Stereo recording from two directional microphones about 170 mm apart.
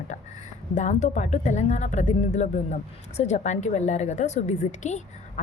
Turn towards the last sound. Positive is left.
turn(degrees=45)  # may be behind; listen again after turning